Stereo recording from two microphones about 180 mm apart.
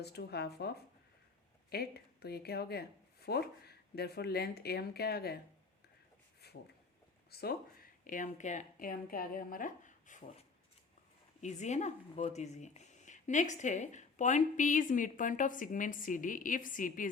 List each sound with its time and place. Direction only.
0.0 s speech: 65° left (ahead or behind)
1.7 s speech: 60° left (ahead or behind)
6.4 s a sound: 65° left (ahead or behind)
7.3 s speech: 60° left (ahead or behind); by 10.2 s 45° left (ahead or behind)
11.3 s speech: 40° left (ahead or behind)